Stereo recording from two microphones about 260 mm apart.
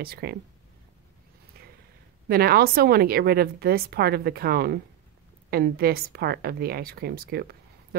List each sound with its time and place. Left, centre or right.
0.0 s speech: right
2.2 s speech: right